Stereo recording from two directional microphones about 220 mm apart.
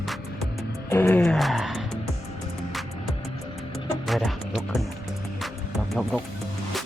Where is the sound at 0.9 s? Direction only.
10° left (ahead or behind).